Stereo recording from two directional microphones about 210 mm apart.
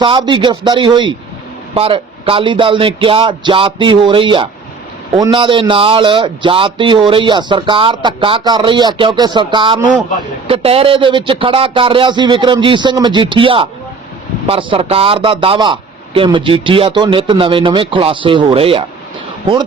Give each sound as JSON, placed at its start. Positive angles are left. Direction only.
{"t": 0.0, "sound": "a man's voice", "side_deg": -25}